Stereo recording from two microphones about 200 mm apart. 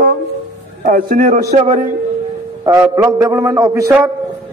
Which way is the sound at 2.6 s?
20° right (ahead or behind).